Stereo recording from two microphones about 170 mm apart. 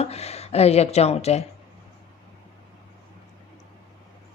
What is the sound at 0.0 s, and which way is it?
Speech, 40° left (ahead or behind).